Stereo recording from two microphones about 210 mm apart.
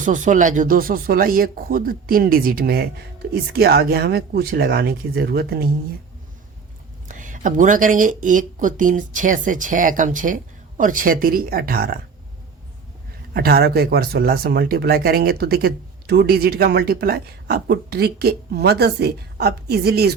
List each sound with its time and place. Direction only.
0.0 s speech: 35° right (ahead or behind)
7.1 s speech: 40° right (ahead or behind)
13.3 s speech: 50° right (ahead or behind)